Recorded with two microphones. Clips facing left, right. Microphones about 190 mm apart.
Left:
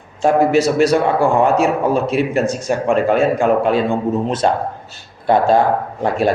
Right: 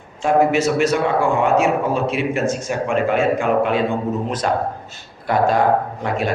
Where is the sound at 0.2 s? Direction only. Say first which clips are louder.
Left 3 dB; 35° left (ahead or behind).